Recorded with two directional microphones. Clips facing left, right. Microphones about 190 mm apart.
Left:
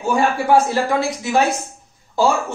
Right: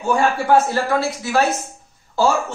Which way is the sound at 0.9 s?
20° left (ahead or behind).